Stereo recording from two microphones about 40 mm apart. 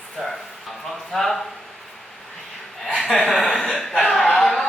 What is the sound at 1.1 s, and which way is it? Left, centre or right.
Speech, centre.